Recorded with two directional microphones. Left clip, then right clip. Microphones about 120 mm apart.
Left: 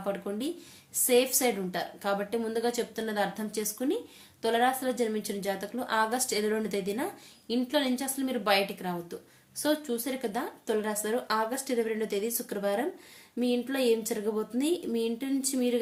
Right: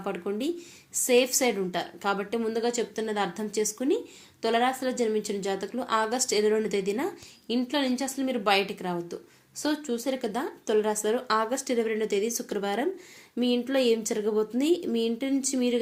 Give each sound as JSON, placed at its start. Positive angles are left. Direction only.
{"t": 0.0, "sound": "speech", "side_deg": -25}